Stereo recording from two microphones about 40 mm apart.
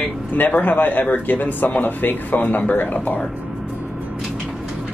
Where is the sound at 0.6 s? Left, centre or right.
Left.